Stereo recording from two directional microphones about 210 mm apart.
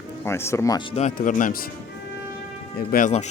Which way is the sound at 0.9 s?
35° left (ahead or behind).